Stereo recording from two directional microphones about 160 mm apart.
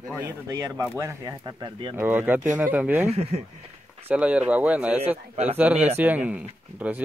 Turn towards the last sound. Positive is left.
turn(degrees=-10)  # may be behind; listen again after turning